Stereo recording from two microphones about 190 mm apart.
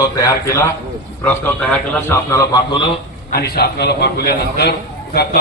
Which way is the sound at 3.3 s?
55° left (ahead or behind).